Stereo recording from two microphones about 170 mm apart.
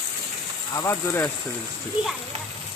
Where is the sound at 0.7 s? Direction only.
15° left (ahead or behind).